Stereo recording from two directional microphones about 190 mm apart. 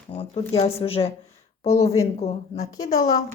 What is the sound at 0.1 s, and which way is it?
Speech, 30° left (ahead or behind).